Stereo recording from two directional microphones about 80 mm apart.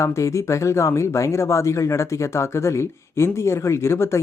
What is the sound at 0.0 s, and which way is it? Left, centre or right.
Speech, left.